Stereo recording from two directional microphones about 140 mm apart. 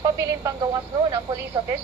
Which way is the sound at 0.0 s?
25° right (ahead or behind).